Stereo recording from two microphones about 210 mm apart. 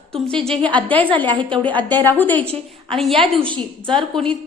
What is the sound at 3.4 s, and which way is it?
Speech, 25° right (ahead or behind).